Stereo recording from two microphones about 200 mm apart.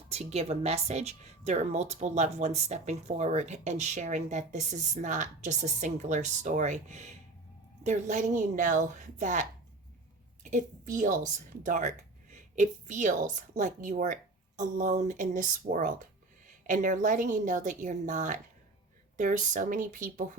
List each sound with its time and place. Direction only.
0.1 s a woman's voice: 30° right (ahead or behind)